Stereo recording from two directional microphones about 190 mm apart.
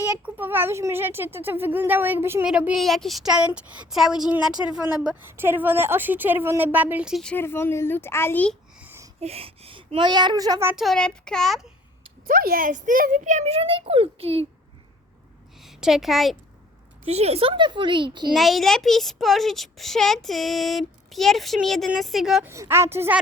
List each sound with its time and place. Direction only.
0.3 s a woman's voice: 10° right (ahead or behind); by 8.5 s 10° left (ahead or behind)
8.8 s a sound: 10° right (ahead or behind)
9.2 s speech: 30° right (ahead or behind)
10.7 s a woman's voice: centre (ahead or behind)
12.3 s speech: 50° right (ahead or behind); by 14.4 s 30° right (ahead or behind)
15.5 s a woman's voice: centre (ahead or behind)
17.1 s speech: 35° right (ahead or behind)
18.3 s a woman's voice: centre (ahead or behind)
22.5 s speech: 15° right (ahead or behind)